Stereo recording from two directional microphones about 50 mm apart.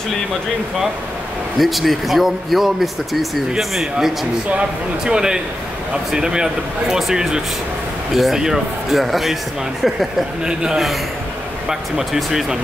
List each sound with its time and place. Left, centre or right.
1.6 s speech: centre
10.4 s speech: centre
12.0 s speech: centre